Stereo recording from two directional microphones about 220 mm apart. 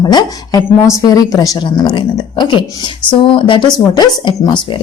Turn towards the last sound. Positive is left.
turn(degrees=20)  # may be behind; listen again after turning